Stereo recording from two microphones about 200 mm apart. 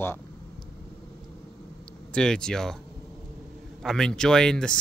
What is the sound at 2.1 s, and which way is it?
Speech, 5° left (ahead or behind).